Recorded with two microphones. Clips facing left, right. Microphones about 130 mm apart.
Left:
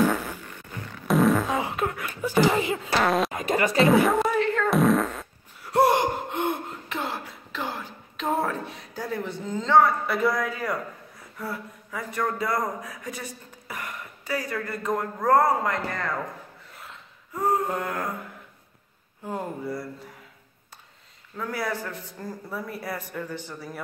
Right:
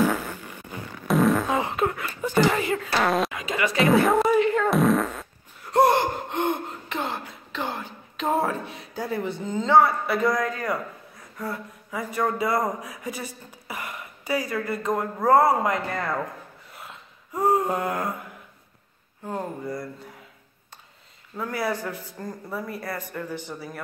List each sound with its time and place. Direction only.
0.0 s fart: centre (ahead or behind)
2.5 s speech: 20° left (ahead or behind)
3.0 s speech: centre (ahead or behind)
3.3 s insect: 45° left (ahead or behind)
3.8 s speech: centre (ahead or behind)
4.6 s fart: centre (ahead or behind)
11.3 s speech: 5° left (ahead or behind)
11.9 s a man's voice: 10° right (ahead or behind)
17.3 s a sound: 15° right (ahead or behind)
19.2 s speech: 5° left (ahead or behind)
21.5 s speech: centre (ahead or behind)